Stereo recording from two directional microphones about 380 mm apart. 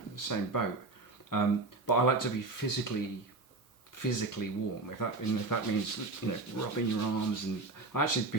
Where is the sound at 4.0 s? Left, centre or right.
Left.